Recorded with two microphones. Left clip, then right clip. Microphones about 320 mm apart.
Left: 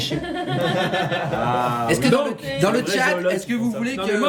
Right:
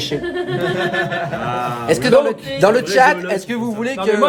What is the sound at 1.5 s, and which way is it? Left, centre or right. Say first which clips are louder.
Speech: left 2 dB; centre.